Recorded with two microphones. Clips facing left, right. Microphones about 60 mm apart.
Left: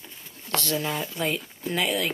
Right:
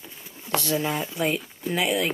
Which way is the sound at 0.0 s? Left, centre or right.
Centre.